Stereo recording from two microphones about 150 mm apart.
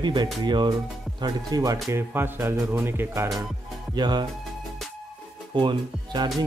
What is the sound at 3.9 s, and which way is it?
Speech, 30° right (ahead or behind).